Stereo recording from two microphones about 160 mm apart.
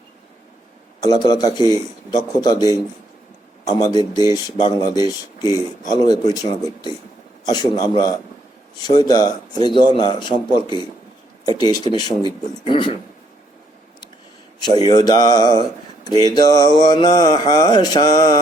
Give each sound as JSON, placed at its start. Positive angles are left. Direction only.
{"t": 1.0, "sound": "mantra", "side_deg": 25}
{"t": 12.6, "sound": "speech", "side_deg": 30}
{"t": 14.8, "sound": "mantra", "side_deg": 25}